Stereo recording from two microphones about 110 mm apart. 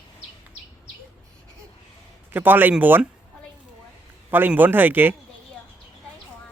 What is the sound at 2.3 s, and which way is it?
Speech, 15° right (ahead or behind).